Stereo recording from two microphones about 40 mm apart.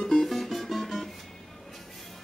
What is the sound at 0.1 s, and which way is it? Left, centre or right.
Music, centre.